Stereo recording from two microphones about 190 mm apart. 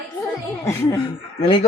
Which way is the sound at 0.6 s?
15° left (ahead or behind).